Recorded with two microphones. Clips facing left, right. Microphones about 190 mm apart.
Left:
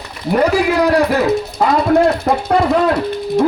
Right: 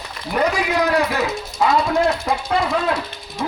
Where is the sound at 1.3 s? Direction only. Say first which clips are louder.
Left 4 dB; 60° left (ahead or behind).